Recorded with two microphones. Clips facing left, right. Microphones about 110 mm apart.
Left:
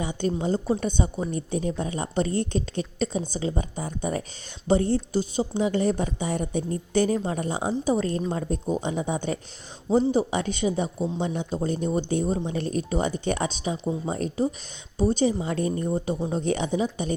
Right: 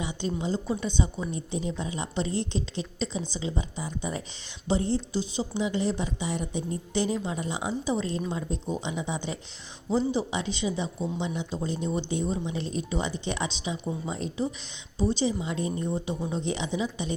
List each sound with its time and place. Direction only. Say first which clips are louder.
0.0 s a woman's voice: left 4 dB; 50° left (ahead or behind)